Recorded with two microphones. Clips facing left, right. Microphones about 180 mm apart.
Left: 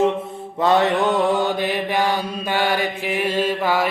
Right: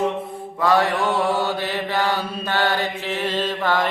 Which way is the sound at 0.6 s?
20° left (ahead or behind).